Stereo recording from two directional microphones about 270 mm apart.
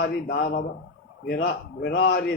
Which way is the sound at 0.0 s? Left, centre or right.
Left.